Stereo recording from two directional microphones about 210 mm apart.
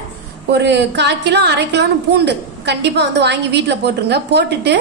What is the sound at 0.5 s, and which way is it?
A woman's voice, 55° right (ahead or behind).